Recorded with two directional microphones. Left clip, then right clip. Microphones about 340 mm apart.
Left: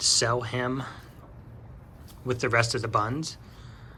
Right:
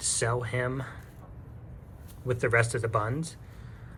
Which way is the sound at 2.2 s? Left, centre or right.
Centre.